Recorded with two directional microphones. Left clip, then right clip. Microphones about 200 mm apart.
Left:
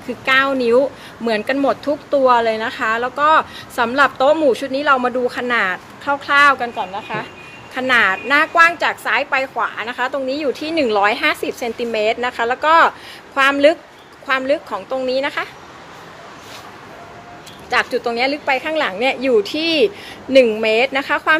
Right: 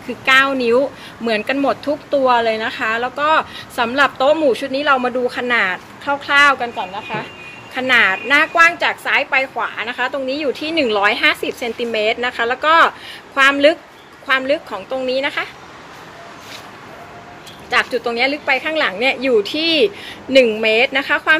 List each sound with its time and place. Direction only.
0.2 s speech: 10° left (ahead or behind)
17.6 s speech: 10° left (ahead or behind)